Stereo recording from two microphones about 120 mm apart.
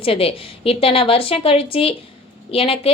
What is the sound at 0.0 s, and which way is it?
A woman's voice, 50° left (ahead or behind).